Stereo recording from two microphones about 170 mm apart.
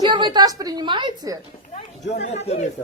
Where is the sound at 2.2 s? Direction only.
40° left (ahead or behind).